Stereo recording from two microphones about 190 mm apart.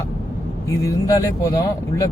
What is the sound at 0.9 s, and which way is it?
Speech, 20° left (ahead or behind).